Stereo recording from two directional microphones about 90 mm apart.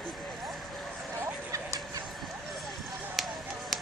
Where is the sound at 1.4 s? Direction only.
40° right (ahead or behind).